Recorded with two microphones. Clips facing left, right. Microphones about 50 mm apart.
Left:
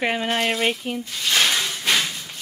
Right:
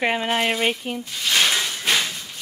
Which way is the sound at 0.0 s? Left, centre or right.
Centre.